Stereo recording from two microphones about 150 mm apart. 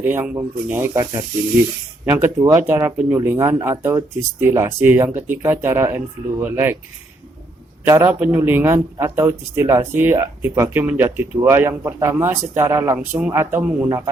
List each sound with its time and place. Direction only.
0.0 s speech: 15° right (ahead or behind)
2.4 s speech: 15° right (ahead or behind)
7.9 s speech: 15° right (ahead or behind)